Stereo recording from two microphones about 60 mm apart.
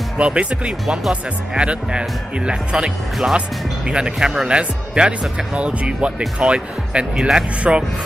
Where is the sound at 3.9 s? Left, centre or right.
Centre.